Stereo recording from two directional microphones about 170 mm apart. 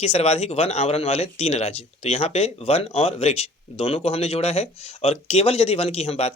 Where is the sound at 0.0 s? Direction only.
40° left (ahead or behind).